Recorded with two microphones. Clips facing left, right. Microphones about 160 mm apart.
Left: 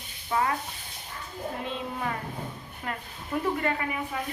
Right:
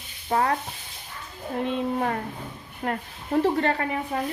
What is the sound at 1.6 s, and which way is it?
A child's voice, 55° right (ahead or behind).